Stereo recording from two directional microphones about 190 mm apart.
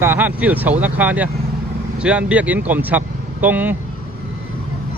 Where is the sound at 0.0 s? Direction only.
10° right (ahead or behind).